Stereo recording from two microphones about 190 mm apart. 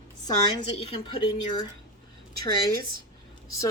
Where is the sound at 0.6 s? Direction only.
30° left (ahead or behind).